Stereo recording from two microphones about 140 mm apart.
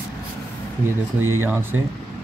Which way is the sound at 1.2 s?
15° right (ahead or behind).